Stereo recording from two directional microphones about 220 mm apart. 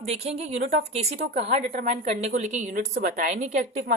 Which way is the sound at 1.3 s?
30° right (ahead or behind).